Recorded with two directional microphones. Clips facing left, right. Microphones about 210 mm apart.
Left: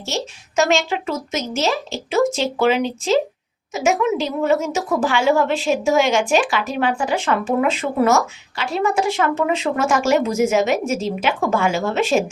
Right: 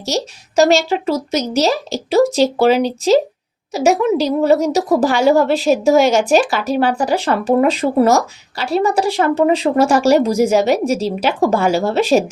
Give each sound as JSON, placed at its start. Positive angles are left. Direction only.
{"t": 0.0, "sound": "a woman's voice", "side_deg": -35}